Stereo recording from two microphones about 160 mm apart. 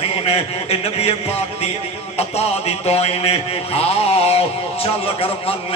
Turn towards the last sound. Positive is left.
turn(degrees=40)  # may be behind; listen again after turning